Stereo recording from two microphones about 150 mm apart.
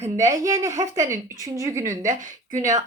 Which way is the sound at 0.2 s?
20° right (ahead or behind).